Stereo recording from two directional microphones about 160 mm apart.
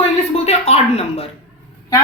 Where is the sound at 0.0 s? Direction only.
40° left (ahead or behind).